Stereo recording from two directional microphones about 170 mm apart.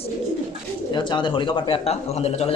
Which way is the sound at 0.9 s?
25° left (ahead or behind).